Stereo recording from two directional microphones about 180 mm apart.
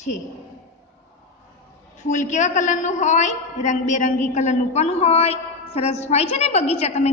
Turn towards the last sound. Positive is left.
turn(degrees=35)  # may be behind; listen again after turning